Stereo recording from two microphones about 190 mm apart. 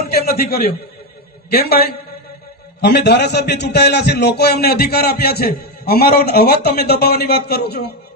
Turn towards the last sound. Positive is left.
turn(degrees=60)  # may be behind; listen again after turning